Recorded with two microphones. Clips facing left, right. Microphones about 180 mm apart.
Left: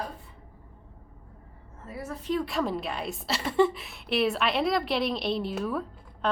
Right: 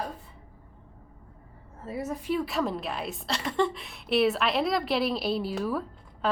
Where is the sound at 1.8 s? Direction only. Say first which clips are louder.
Right 5 dB; 25° right (ahead or behind).